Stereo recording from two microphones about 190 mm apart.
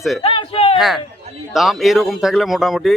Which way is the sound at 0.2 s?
30° left (ahead or behind).